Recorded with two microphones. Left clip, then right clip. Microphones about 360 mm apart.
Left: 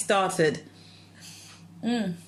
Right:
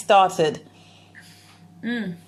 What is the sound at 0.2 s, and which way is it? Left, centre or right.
Speech, right.